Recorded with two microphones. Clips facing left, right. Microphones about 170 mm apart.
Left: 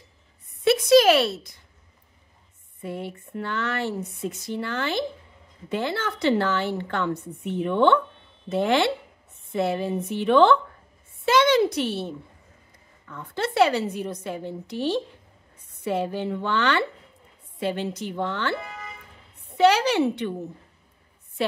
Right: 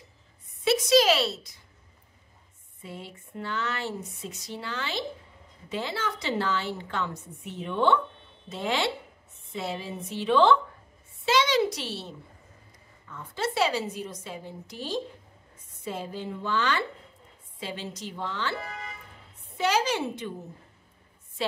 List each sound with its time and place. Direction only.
0.7 s a woman's voice: 55° left (ahead or behind)
2.8 s a woman's voice: 60° left (ahead or behind)
13.1 s a woman's voice: 60° left (ahead or behind)
21.4 s a woman's voice: 60° left (ahead or behind)